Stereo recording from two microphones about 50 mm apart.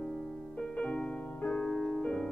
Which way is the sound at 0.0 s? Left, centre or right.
Centre.